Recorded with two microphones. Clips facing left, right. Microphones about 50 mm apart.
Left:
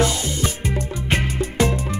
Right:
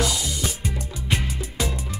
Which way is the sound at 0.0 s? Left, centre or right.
Left.